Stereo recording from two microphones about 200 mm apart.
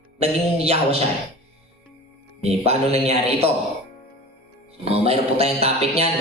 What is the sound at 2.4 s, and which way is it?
A man's voice, 30° right (ahead or behind).